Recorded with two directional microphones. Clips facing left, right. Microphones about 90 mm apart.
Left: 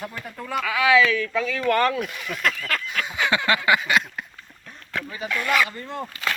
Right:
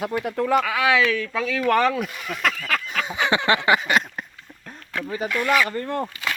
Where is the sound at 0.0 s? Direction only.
80° right.